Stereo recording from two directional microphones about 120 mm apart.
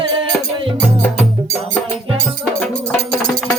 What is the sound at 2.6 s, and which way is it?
Music, 5° left (ahead or behind).